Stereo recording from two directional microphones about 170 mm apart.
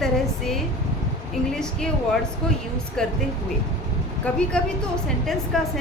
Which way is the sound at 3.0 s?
5° left (ahead or behind).